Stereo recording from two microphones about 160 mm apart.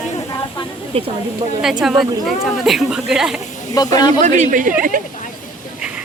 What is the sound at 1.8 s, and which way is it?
A woman's voice, centre (ahead or behind).